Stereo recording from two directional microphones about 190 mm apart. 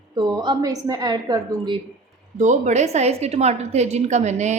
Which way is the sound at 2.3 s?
40° right (ahead or behind).